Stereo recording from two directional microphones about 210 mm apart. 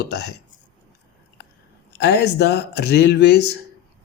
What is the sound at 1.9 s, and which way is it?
Speech, 55° left (ahead or behind).